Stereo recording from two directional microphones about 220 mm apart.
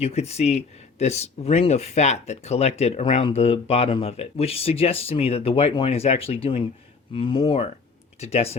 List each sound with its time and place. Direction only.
0.0 s speech: 30° left (ahead or behind)